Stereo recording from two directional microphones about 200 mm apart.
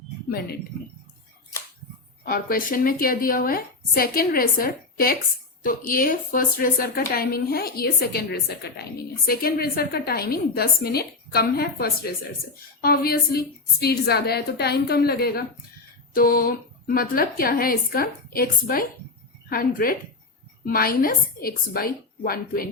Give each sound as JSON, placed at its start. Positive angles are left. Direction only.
{"t": 0.3, "sound": "speech", "side_deg": 50}
{"t": 2.2, "sound": "a woman's voice", "side_deg": 45}